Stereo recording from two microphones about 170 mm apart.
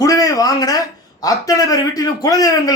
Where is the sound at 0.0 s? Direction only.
20° left (ahead or behind).